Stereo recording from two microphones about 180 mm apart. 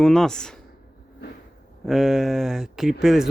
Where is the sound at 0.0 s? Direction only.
5° left (ahead or behind).